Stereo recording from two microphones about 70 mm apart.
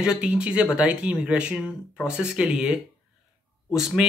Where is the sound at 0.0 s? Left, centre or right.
Centre.